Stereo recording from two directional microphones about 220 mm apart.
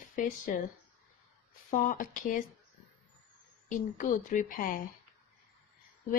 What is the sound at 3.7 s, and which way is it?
Speech, 35° left (ahead or behind).